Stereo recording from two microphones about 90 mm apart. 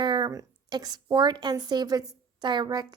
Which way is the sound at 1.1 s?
50° right (ahead or behind).